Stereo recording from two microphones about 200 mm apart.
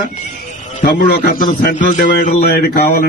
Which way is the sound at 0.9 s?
55° left (ahead or behind).